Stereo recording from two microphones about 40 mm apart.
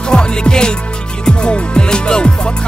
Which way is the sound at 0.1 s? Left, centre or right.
Left.